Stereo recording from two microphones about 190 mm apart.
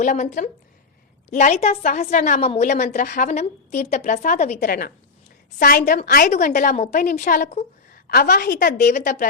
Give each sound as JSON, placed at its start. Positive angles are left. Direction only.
{"t": 0.0, "sound": "a woman's voice", "side_deg": 40}
{"t": 1.8, "sound": "a woman's voice", "side_deg": 50}
{"t": 4.6, "sound": "a woman's voice", "side_deg": 50}
{"t": 6.3, "sound": "a woman's voice", "side_deg": 40}